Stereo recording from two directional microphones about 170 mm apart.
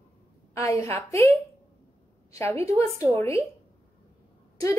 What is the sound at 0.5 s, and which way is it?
Speech, 20° left (ahead or behind).